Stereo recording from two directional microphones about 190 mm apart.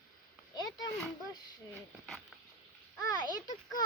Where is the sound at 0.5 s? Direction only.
20° left (ahead or behind).